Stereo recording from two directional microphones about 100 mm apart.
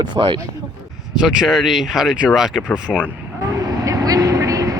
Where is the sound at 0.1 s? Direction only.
55° right (ahead or behind).